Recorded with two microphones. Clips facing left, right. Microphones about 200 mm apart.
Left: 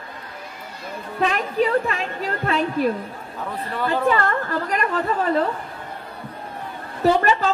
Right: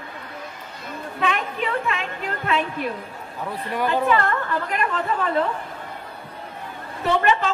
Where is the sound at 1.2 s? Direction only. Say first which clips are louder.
Left 5 dB; 40° left (ahead or behind).